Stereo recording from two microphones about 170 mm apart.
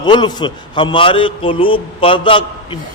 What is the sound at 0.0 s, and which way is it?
A man's voice, 25° left (ahead or behind).